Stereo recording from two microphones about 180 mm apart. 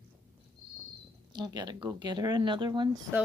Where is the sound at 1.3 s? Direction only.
25° right (ahead or behind).